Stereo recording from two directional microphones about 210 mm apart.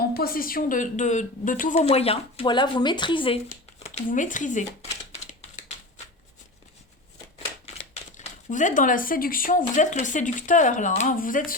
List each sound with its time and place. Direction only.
0.1 s a woman's voice: 45° left (ahead or behind)
5.1 s typewriter: 30° left (ahead or behind)
8.1 s a woman's voice: 35° left (ahead or behind)